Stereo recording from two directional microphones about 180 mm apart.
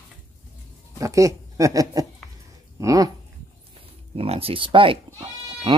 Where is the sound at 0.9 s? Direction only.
15° right (ahead or behind).